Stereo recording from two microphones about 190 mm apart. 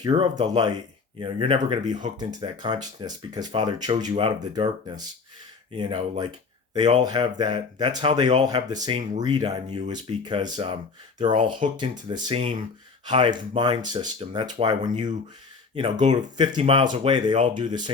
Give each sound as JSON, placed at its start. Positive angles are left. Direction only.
{"t": 0.0, "sound": "speech", "side_deg": -25}
{"t": 3.9, "sound": "speech", "side_deg": -35}